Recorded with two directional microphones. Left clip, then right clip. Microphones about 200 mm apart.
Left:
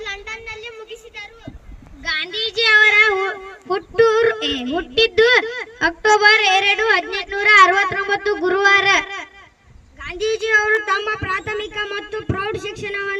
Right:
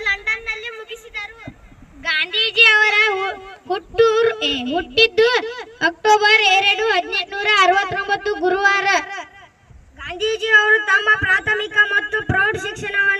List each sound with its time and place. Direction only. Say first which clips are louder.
0.0 s a sound: right 8 dB; 30° right (ahead or behind)
2.7 s female singing: left 3 dB; 35° right (ahead or behind)
10.5 s music: right 4 dB; 30° right (ahead or behind)